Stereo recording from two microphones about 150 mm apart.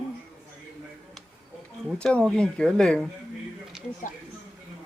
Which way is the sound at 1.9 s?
5° left (ahead or behind).